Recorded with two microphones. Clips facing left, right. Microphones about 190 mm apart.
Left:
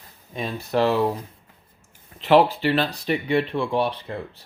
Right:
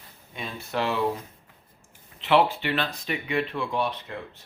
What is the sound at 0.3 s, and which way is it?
Speech, 35° left (ahead or behind).